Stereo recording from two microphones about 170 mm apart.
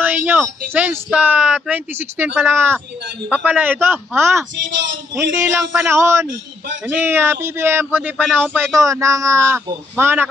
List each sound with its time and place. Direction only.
0.0 s speech: 10° right (ahead or behind)